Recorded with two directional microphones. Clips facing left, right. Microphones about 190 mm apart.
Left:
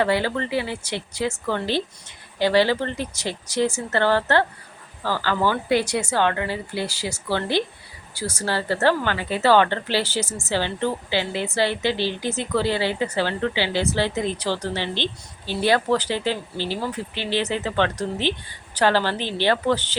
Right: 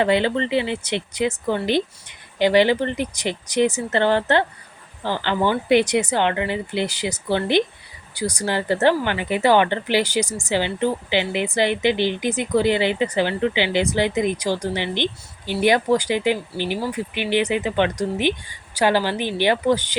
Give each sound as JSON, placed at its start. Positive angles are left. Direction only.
{"t": 0.0, "sound": "a woman's voice", "side_deg": -20}